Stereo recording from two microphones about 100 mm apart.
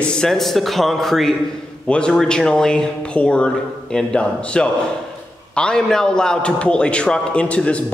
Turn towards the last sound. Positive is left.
turn(degrees=10)  # may be behind; listen again after turning